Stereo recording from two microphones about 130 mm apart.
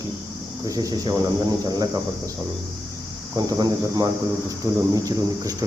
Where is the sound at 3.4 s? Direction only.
30° right (ahead or behind).